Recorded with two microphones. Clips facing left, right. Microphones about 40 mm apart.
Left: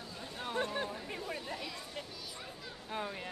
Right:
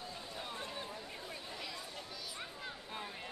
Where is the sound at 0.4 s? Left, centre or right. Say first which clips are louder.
Left 10 dB; left.